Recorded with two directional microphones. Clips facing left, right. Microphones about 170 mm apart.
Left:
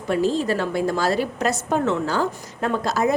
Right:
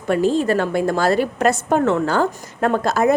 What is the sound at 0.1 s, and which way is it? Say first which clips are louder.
A woman's voice: right 4 dB; 55° right (ahead or behind).